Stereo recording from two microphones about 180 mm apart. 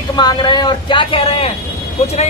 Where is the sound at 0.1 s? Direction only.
25° left (ahead or behind).